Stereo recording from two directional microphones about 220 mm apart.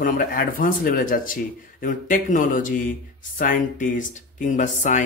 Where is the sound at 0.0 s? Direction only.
40° left (ahead or behind).